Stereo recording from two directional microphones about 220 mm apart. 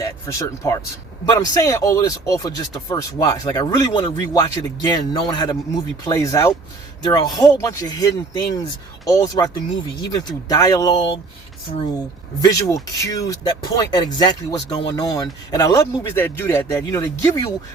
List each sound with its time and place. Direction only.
0.0 s speech: 15° left (ahead or behind)